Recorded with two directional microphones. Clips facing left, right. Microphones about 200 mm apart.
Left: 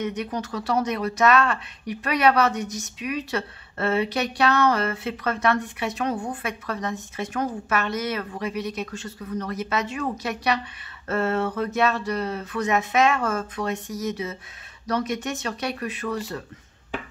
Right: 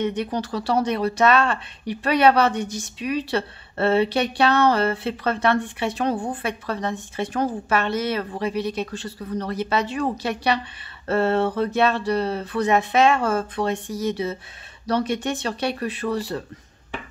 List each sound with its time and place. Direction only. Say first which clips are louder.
0.0 s speech: right 4 dB; 30° right (ahead or behind)